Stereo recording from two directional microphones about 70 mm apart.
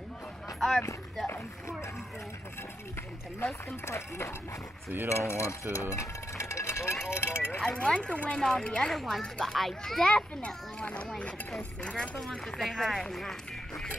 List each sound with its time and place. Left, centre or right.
0.6 s speech: centre
3.8 s speech: left
4.8 s speech: right
5.1 s speech: left
7.6 s speech: centre